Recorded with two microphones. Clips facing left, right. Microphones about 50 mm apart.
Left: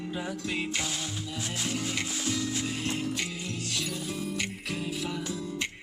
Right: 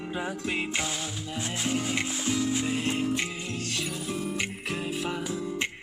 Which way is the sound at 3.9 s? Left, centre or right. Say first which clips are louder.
Right 2 dB; centre.